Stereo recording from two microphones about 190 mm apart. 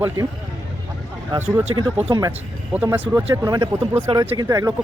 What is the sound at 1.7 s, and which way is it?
Speech, 25° right (ahead or behind).